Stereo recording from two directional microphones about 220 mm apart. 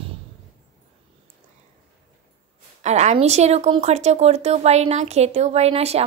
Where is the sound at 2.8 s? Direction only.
30° right (ahead or behind).